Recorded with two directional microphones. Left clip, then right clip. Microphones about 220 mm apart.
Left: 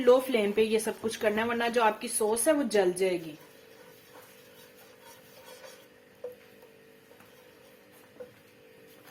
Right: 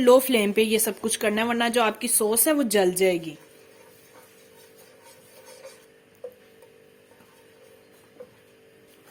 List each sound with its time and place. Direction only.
0.0 s speech: 50° right (ahead or behind)